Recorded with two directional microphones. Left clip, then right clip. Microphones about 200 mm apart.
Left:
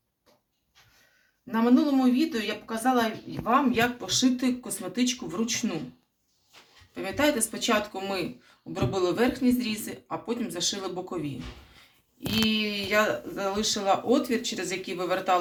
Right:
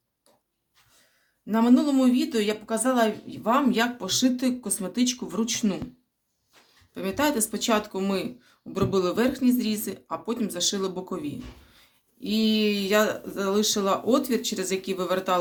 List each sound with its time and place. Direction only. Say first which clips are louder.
1.5 s speech: right 2 dB; 75° right (ahead or behind)
6.9 s speech: even; 70° right (ahead or behind)